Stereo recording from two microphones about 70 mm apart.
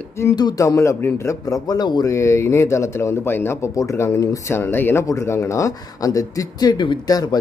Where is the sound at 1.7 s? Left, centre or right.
Left.